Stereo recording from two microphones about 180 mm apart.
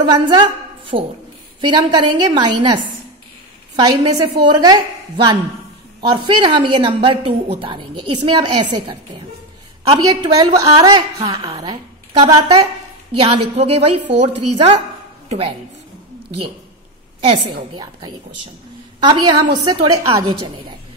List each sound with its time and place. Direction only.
0.0 s a woman's voice: 25° right (ahead or behind)
9.8 s a woman's voice: 20° right (ahead or behind)
17.2 s a woman's voice: 30° right (ahead or behind)